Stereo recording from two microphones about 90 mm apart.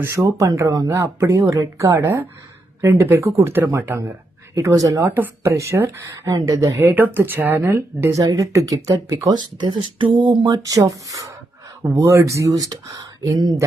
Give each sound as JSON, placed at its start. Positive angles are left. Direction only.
{"t": 0.0, "sound": "speech", "side_deg": -30}
{"t": 5.1, "sound": "speech", "side_deg": -20}
{"t": 5.5, "sound": "speech", "side_deg": -30}
{"t": 6.1, "sound": "speech", "side_deg": -45}
{"t": 6.8, "sound": "speech", "side_deg": -20}
{"t": 8.1, "sound": "speech", "side_deg": -40}
{"t": 10.4, "sound": "speech", "side_deg": -40}